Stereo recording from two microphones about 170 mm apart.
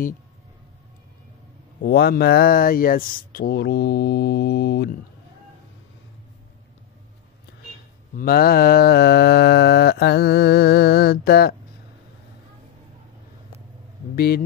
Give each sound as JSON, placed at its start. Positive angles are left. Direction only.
{"t": 1.8, "sound": "mantra", "side_deg": 65}
{"t": 8.2, "sound": "mantra", "side_deg": 60}
{"t": 14.1, "sound": "a man's voice", "side_deg": 65}